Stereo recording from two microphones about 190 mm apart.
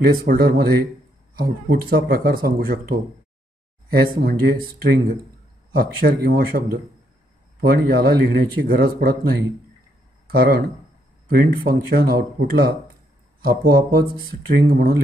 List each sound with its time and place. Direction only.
0.0 s speech: 55° right (ahead or behind)
3.9 s speech: 55° right (ahead or behind)
5.7 s speech: 55° right (ahead or behind)
7.6 s speech: 55° right (ahead or behind)